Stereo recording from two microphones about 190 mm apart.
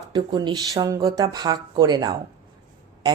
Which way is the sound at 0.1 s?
25° right (ahead or behind).